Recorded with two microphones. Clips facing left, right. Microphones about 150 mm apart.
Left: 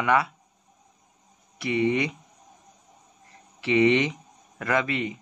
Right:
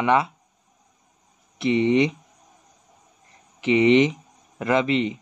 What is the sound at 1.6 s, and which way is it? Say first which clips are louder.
Speech: right 5 dB; 25° right (ahead or behind).